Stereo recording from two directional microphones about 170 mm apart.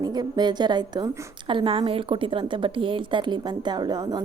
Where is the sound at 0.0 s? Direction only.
25° right (ahead or behind).